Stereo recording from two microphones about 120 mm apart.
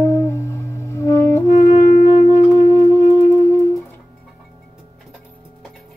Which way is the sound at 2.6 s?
20° left (ahead or behind).